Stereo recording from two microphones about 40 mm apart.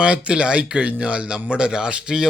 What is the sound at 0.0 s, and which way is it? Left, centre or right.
Speech, right.